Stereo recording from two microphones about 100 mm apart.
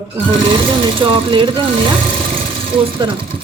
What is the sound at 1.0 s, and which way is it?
Speech, 55° right (ahead or behind).